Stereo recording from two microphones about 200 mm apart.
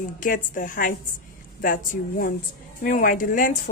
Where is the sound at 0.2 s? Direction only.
40° left (ahead or behind).